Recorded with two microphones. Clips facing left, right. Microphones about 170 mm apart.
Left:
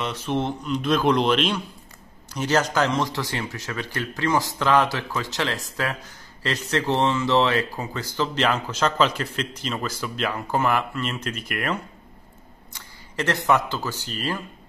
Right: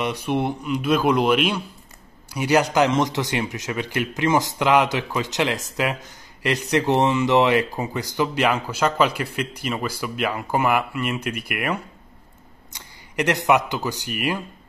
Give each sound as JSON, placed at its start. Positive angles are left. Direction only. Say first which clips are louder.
{"t": 0.0, "sound": "speech", "louder": "right 2 dB", "side_deg": -15}